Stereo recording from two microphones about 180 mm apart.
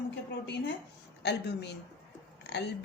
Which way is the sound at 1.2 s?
70° left (ahead or behind).